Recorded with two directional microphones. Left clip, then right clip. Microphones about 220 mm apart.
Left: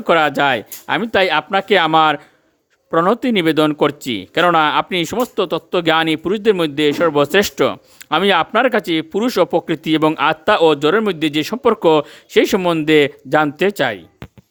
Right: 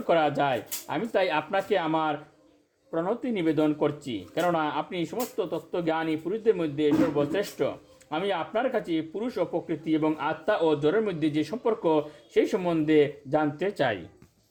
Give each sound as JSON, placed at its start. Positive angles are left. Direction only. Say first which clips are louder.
{"t": 0.1, "sound": "speech", "louder": "left 10 dB", "side_deg": 35}